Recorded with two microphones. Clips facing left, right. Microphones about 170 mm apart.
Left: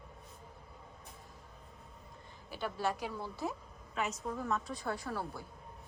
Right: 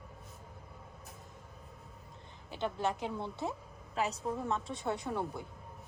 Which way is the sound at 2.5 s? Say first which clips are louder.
Right 2 dB; 20° right (ahead or behind).